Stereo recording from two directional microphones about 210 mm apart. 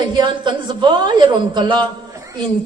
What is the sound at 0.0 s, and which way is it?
A man's voice, 20° right (ahead or behind).